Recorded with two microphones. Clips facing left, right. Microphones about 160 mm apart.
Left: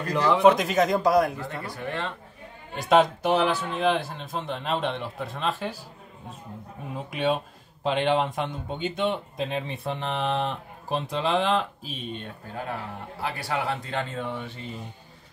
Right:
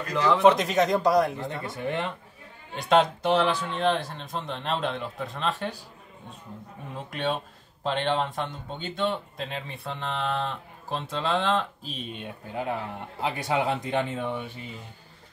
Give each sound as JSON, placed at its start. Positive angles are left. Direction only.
{"t": 0.1, "sound": "speech", "side_deg": 15}
{"t": 0.4, "sound": "speech", "side_deg": 0}
{"t": 1.4, "sound": "speech", "side_deg": -20}
{"t": 2.7, "sound": "speech", "side_deg": 0}
{"t": 7.1, "sound": "speech", "side_deg": 10}
{"t": 11.9, "sound": "a man's voice", "side_deg": -5}